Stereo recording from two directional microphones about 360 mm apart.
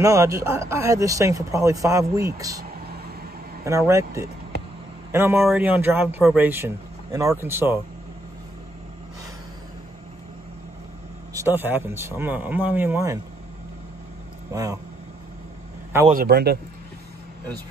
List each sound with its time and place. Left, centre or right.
0.0 s a man's voice: centre
3.6 s a man's voice: centre
11.3 s speech: centre
14.5 s a man's voice: centre
16.1 s a man's voice: right